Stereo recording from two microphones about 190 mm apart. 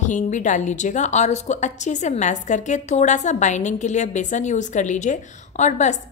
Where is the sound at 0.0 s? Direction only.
40° left (ahead or behind).